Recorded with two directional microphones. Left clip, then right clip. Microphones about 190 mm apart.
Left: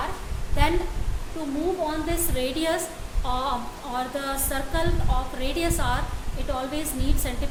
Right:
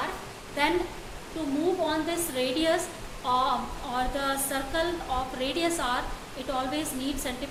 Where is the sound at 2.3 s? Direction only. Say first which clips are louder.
Right 1 dB; 25° left (ahead or behind).